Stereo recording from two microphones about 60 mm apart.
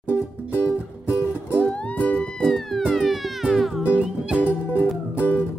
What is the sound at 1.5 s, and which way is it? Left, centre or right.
Music, left.